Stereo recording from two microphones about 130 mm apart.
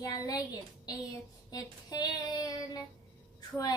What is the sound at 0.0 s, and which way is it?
Speech, 30° left (ahead or behind).